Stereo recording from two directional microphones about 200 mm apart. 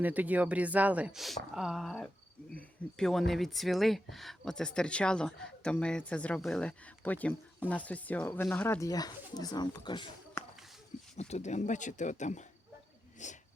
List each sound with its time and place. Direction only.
0.0 s speech: 10° right (ahead or behind); by 10.4 s 20° left (ahead or behind)
11.2 s speech: 35° left (ahead or behind)